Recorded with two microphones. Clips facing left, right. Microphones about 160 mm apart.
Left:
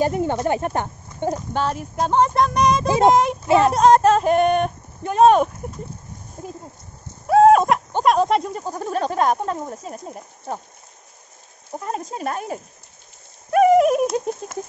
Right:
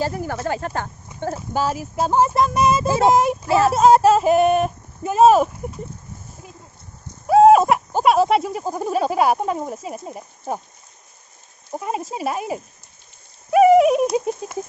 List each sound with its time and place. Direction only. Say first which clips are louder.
0.0 s speech: left 4 dB; 20° left (ahead or behind)
1.3 s speech: right 3 dB; 5° right (ahead or behind)
6.4 s a sound: left 11 dB; 45° left (ahead or behind)
7.2 s a sound: right 1 dB; 5° right (ahead or behind)
9.6 s speech: right 2 dB; 10° right (ahead or behind)
11.8 s speech: right 2 dB; 5° right (ahead or behind)